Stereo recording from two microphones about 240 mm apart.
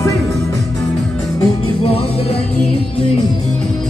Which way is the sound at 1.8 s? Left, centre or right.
Left.